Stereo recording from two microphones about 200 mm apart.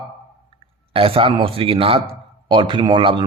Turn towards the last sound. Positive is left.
turn(degrees=-25)  # may be behind; listen again after turning